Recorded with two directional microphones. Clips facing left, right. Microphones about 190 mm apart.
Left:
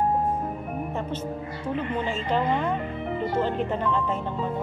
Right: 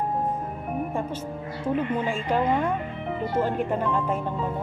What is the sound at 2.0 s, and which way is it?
A woman's voice, 10° right (ahead or behind).